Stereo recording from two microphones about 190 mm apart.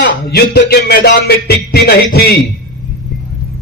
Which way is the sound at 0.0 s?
60° left (ahead or behind).